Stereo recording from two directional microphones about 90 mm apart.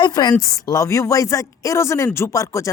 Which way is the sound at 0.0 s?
50° left (ahead or behind).